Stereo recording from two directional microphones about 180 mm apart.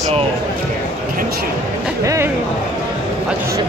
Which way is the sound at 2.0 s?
15° right (ahead or behind).